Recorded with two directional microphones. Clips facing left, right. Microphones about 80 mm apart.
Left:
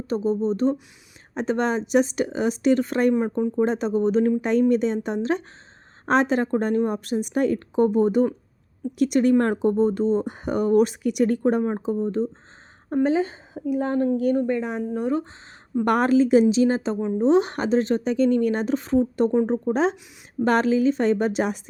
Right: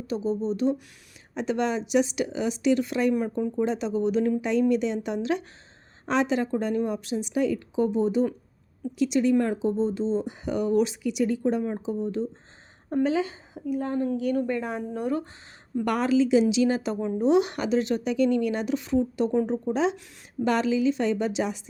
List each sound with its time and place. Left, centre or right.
0.1 s speech: left
3.2 s speech: left
3.6 s speech: left
13.7 s speech: left
14.2 s speech: left
14.4 s speech: centre
15.8 s speech: left